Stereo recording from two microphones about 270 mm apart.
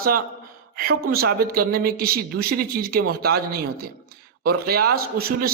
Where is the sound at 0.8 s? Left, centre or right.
Right.